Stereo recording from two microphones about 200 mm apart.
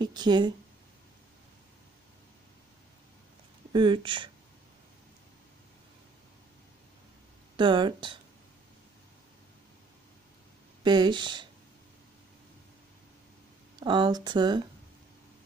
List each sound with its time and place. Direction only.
0.0 s a sound: 20° right (ahead or behind)
3.7 s speech: 25° right (ahead or behind)
7.5 s speech: 25° right (ahead or behind)
10.8 s speech: 20° right (ahead or behind)
13.7 s speech: 20° right (ahead or behind)